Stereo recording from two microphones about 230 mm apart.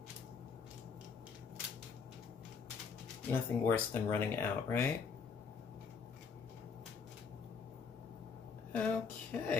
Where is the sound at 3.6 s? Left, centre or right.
Centre.